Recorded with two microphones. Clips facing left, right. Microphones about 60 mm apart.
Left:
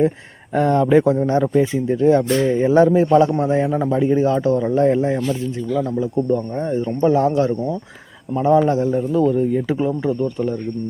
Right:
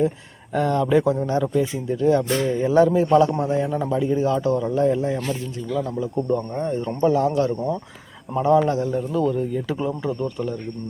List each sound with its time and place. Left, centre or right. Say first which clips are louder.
0.5 s speech: left 4 dB; left
3.7 s a man's voice: left 4 dB; centre
3.9 s a man's voice: left 4 dB; left
6.6 s speech: left 3 dB; centre
7.0 s a man's voice: left 3 dB; left